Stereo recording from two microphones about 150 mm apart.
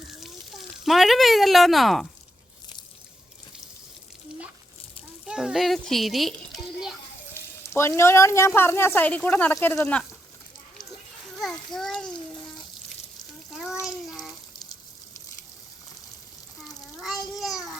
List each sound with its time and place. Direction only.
0.9 s speech: centre (ahead or behind)
5.2 s a child's voice: 5° right (ahead or behind)
7.6 s speech: 20° left (ahead or behind)
11.3 s speech: centre (ahead or behind)
13.8 s bathtub: 5° right (ahead or behind)